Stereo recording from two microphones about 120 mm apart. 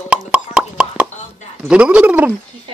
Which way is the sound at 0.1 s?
10° right (ahead or behind).